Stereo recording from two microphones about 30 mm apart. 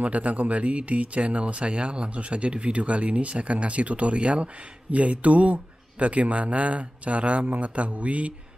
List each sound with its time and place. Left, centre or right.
0.0 s speech: right